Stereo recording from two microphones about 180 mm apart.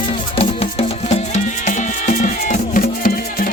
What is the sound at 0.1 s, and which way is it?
Music, 35° left (ahead or behind).